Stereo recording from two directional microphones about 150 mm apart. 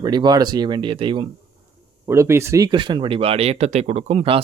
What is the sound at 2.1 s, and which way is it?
Speech, 15° right (ahead or behind).